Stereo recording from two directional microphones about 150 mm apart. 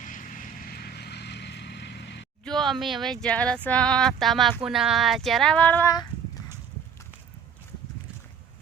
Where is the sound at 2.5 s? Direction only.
Centre (ahead or behind).